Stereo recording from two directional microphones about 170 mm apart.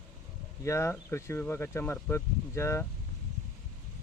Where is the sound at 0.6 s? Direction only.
15° left (ahead or behind).